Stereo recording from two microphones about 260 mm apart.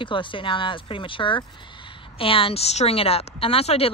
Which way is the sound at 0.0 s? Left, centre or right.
Centre.